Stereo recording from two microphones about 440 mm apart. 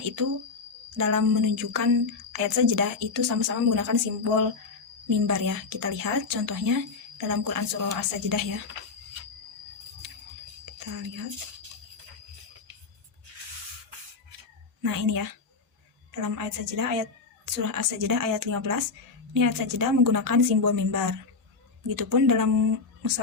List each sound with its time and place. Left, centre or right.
0.9 s a woman's voice: right
10.7 s whispering: right
14.8 s a woman's voice: right